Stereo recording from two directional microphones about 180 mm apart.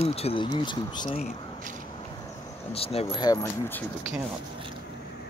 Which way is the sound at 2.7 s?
35° left (ahead or behind).